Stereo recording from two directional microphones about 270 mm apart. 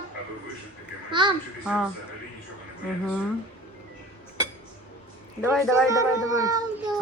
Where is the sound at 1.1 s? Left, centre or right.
Centre.